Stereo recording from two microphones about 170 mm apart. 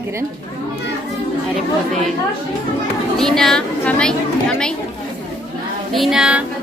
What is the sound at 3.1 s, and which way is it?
A woman's voice, centre (ahead or behind).